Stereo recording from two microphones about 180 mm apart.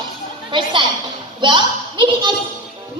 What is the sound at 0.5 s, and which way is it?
A child's voice, 25° right (ahead or behind).